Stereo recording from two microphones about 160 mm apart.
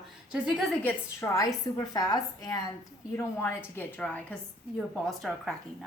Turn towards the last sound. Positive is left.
turn(degrees=0)  # may be behind; listen again after turning